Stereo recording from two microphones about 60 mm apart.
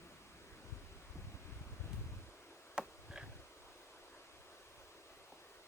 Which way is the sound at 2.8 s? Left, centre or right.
Centre.